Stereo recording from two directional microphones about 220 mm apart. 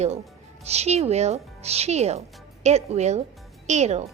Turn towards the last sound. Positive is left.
turn(degrees=-30)  # may be behind; listen again after turning